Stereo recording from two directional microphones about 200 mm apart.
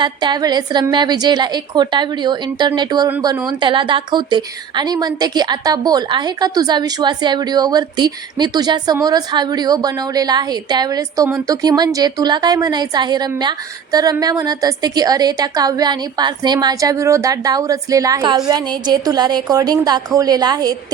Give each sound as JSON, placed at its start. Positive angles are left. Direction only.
{"t": 0.0, "sound": "a woman's voice", "side_deg": -20}